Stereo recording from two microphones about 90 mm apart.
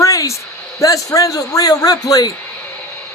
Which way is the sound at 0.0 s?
35° left (ahead or behind).